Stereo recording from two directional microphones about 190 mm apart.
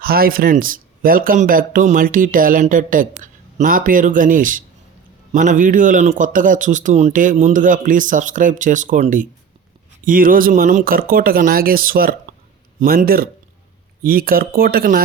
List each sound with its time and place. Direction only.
0.0 s a man's voice: 50° right (ahead or behind)